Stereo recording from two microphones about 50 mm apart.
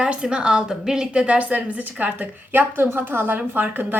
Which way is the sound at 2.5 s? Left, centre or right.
Right.